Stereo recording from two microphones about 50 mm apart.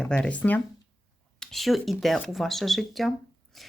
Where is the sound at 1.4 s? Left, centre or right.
Centre.